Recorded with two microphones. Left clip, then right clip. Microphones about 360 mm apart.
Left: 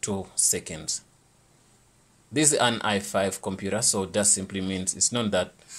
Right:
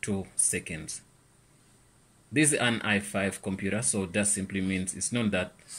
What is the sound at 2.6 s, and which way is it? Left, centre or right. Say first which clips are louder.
Speech: left 4 dB; left.